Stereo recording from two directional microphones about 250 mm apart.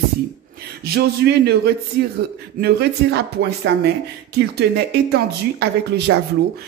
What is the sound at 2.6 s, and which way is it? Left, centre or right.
Speech, right.